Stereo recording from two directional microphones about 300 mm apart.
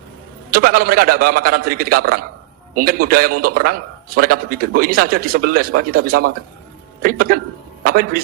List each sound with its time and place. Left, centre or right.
0.5 s a man's voice: right